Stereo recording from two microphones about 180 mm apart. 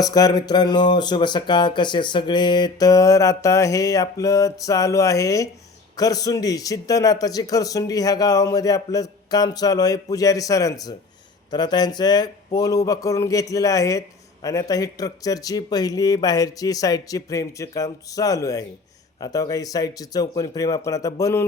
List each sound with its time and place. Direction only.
0.0 s speech: 20° left (ahead or behind)